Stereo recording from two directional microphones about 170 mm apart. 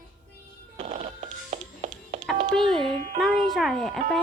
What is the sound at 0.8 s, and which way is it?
Music, 40° right (ahead or behind).